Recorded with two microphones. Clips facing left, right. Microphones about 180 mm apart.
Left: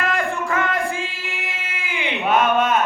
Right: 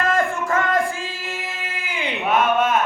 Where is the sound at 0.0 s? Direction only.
40° right (ahead or behind).